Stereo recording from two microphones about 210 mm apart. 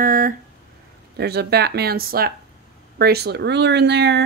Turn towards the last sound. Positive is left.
turn(degrees=-55)  # may be behind; listen again after turning